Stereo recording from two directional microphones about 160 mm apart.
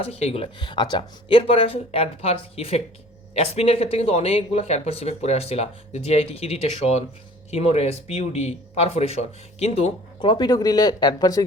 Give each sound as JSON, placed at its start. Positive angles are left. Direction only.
{"t": 0.0, "sound": "speech", "side_deg": 40}
{"t": 10.2, "sound": "speech", "side_deg": 30}